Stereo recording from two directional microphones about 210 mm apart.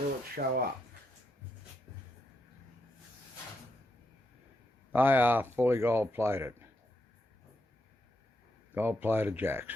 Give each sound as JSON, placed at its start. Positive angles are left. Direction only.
{"t": 0.3, "sound": "speech", "side_deg": -45}
{"t": 4.9, "sound": "speech", "side_deg": -10}
{"t": 8.7, "sound": "speech", "side_deg": -10}